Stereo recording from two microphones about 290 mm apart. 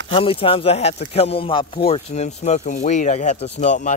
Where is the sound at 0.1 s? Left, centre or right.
Centre.